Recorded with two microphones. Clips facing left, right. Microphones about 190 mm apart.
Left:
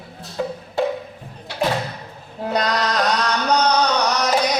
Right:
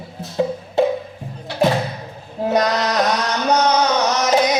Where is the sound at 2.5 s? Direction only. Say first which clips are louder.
Right 3 dB; 20° right (ahead or behind).